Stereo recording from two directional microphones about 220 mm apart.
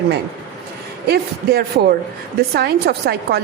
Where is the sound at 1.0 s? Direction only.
45° right (ahead or behind).